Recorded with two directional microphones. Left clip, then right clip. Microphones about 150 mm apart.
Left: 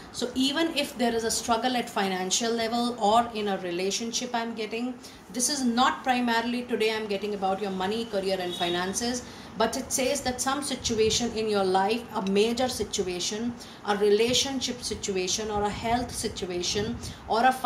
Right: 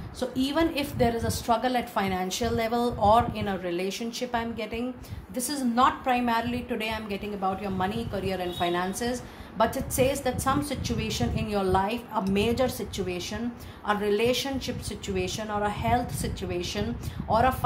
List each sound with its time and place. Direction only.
0.2 s a woman's voice: 50° right (ahead or behind)
5.3 s a woman's voice: 45° right (ahead or behind)